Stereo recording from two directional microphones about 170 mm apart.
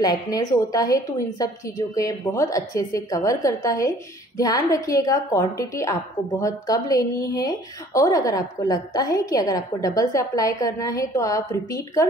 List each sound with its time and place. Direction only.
0.0 s a woman's voice: 25° left (ahead or behind)